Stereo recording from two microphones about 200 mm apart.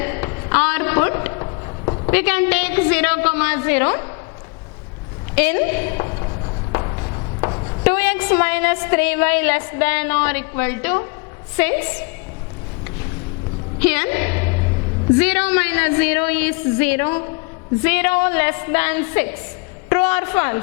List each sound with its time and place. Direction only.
0.0 s a sound: 15° left (ahead or behind)
2.0 s a woman's voice: 10° left (ahead or behind)
5.3 s writing: 10° left (ahead or behind)
7.9 s a woman's voice: 10° left (ahead or behind)
13.7 s a woman's voice: 10° left (ahead or behind)